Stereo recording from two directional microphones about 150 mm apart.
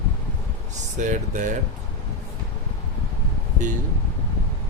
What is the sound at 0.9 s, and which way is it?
Speech, 55° right (ahead or behind).